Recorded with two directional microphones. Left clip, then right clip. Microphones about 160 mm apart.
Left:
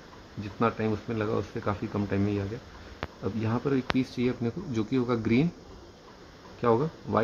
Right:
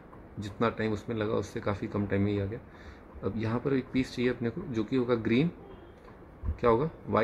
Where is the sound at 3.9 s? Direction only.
45° left (ahead or behind).